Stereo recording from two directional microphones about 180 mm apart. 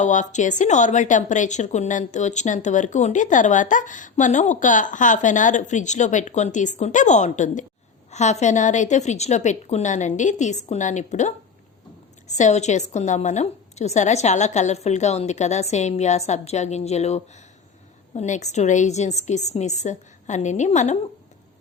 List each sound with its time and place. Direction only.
0.0 s a woman's voice: 40° left (ahead or behind)